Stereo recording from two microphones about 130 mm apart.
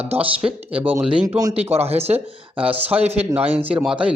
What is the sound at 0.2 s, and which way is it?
Speech, 10° right (ahead or behind).